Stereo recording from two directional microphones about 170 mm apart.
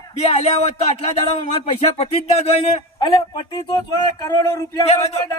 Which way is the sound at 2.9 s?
25° left (ahead or behind).